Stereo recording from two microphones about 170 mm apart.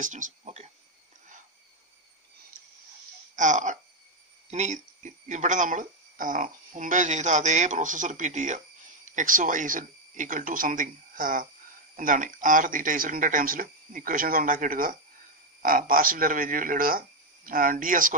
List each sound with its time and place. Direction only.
0.0 s speech: 45° right (ahead or behind)
3.3 s speech: 50° right (ahead or behind)